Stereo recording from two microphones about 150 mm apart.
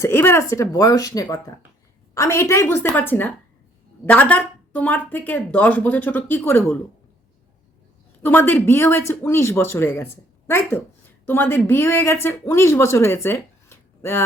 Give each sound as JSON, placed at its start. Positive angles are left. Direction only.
{"t": 0.0, "sound": "speech", "side_deg": 15}
{"t": 8.2, "sound": "speech", "side_deg": 15}